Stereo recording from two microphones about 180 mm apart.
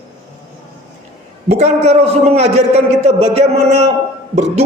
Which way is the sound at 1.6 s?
35° right (ahead or behind).